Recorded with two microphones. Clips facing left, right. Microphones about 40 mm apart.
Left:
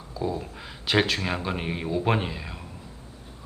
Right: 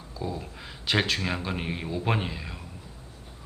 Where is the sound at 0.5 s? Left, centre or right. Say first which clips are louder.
Left 2 dB; centre.